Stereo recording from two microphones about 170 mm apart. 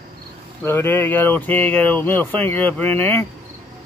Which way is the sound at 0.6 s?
15° left (ahead or behind).